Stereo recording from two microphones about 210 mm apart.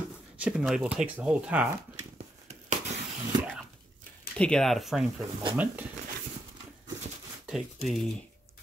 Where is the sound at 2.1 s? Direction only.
30° right (ahead or behind).